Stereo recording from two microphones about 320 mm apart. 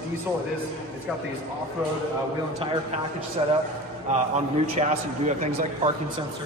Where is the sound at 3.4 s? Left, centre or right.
Centre.